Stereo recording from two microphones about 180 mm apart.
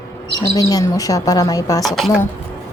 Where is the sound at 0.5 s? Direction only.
20° left (ahead or behind).